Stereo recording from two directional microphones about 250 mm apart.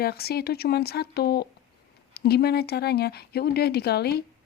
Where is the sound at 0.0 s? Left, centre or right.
Left.